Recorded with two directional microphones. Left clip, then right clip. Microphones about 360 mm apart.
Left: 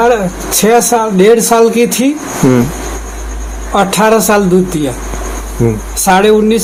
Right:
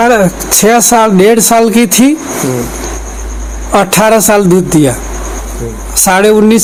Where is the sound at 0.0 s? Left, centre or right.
Right.